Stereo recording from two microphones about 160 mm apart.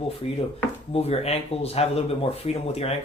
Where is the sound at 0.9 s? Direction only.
40° left (ahead or behind).